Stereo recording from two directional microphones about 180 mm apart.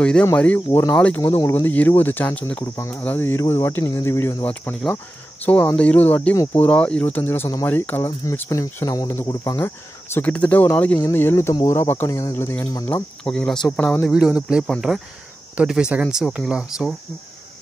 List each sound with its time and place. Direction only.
0.0 s speech: 5° left (ahead or behind)
0.9 s speech: 5° left (ahead or behind)
10.1 s speech: 10° left (ahead or behind)